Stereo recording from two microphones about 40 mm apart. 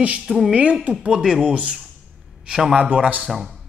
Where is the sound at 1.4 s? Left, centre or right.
Right.